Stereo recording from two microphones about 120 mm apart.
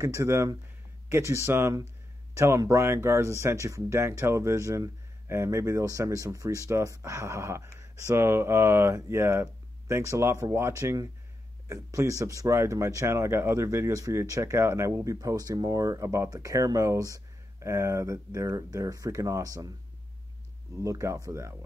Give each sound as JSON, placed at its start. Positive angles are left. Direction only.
{"t": 0.0, "sound": "speech", "side_deg": -25}
{"t": 20.8, "sound": "speech", "side_deg": -25}